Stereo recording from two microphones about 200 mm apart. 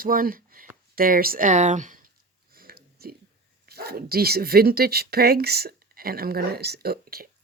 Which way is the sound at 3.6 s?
50° right (ahead or behind).